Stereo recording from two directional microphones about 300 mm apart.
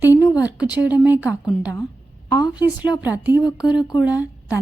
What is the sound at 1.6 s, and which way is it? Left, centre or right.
A woman's voice, centre.